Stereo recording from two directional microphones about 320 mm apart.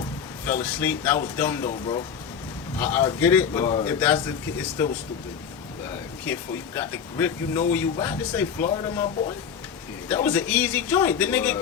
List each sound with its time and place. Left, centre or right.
0.4 s a man's voice: centre
6.2 s a man's voice: centre